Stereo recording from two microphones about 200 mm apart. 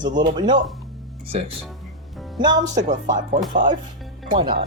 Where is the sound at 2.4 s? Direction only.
20° right (ahead or behind).